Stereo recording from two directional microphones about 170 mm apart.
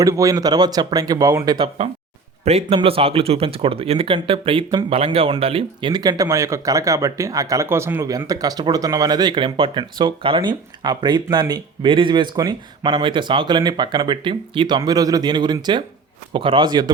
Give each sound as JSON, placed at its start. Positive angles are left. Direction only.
{"t": 0.0, "sound": "speech", "side_deg": -20}